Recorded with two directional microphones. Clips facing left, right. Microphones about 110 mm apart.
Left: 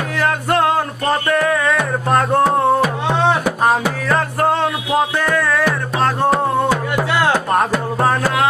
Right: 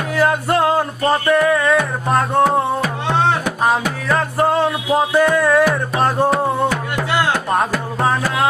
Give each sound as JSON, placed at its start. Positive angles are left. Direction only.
{"t": 1.0, "sound": "music", "side_deg": -5}
{"t": 3.6, "sound": "music", "side_deg": 0}
{"t": 5.2, "sound": "music", "side_deg": -15}
{"t": 8.0, "sound": "music", "side_deg": 0}